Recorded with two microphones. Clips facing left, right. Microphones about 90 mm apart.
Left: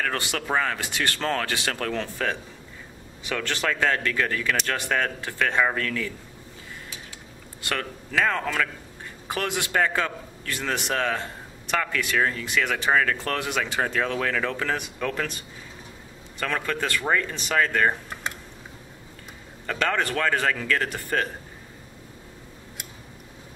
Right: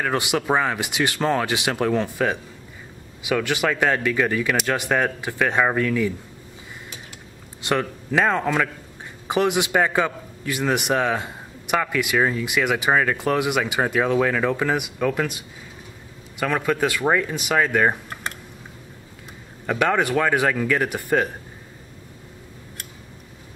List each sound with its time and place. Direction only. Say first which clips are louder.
0.0 s a man's voice: right 5 dB; 15° right (ahead or behind)
7.6 s a man's voice: right 7 dB; 20° right (ahead or behind)
19.6 s a man's voice: right 5 dB; 15° right (ahead or behind)